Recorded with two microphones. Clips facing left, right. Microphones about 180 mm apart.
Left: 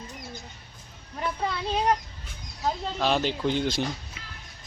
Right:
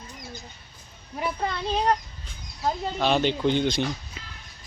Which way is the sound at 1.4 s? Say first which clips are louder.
Even; centre (ahead or behind).